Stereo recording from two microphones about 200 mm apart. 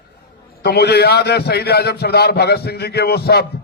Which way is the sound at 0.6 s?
55° left (ahead or behind).